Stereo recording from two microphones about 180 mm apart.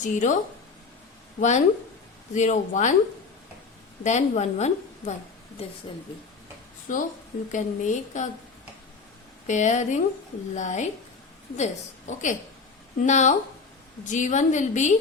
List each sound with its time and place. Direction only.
0.0 s a woman's voice: 45° left (ahead or behind)
1.4 s a woman's voice: 40° left (ahead or behind)
4.0 s a woman's voice: 40° left (ahead or behind)
6.9 s a woman's voice: 45° left (ahead or behind)
9.5 s a woman's voice: 40° left (ahead or behind)